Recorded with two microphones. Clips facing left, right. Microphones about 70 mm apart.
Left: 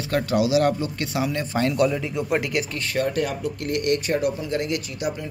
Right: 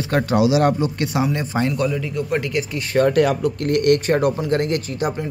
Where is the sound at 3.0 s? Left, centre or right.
Right.